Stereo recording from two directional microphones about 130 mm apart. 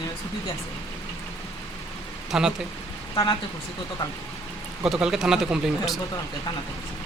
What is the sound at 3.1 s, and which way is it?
Speech, 30° left (ahead or behind).